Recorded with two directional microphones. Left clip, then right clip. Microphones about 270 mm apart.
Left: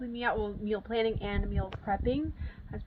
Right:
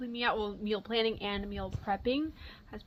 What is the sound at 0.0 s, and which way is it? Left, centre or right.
A woman's voice, centre.